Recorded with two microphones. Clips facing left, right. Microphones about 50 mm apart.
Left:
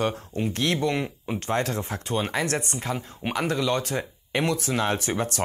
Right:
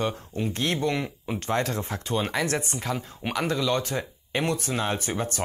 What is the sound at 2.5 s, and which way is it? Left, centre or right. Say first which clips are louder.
Speech: even; left.